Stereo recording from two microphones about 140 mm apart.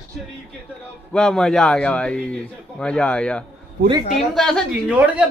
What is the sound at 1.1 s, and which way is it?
A man's voice, 5° left (ahead or behind).